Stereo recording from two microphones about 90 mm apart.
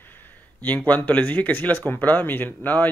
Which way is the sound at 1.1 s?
15° left (ahead or behind).